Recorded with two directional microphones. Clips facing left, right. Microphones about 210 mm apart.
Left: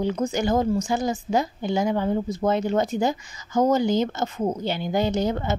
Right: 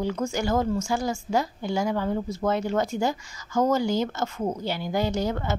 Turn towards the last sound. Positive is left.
turn(degrees=20)  # may be behind; listen again after turning